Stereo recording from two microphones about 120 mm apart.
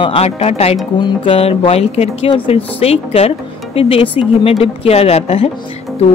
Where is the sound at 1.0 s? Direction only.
50° left (ahead or behind).